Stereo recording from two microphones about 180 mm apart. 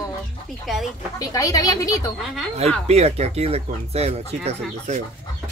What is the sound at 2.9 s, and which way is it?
Speech, 35° right (ahead or behind).